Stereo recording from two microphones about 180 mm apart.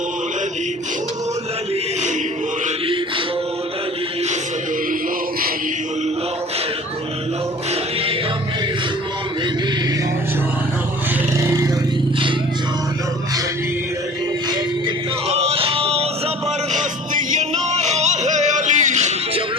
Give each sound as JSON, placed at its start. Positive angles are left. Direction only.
{"t": 11.3, "sound": "vehicle", "side_deg": -20}
{"t": 15.3, "sound": "music", "side_deg": -35}
{"t": 16.7, "sound": "music", "side_deg": -45}